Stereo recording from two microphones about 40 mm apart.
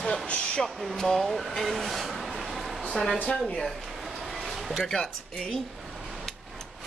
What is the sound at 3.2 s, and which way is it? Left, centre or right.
Speech, centre.